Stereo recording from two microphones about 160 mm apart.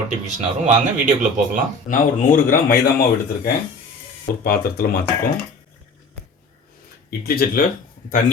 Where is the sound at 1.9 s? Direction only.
60° left (ahead or behind).